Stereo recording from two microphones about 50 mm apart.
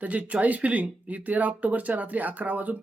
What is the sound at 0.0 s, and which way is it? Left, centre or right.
Speech, right.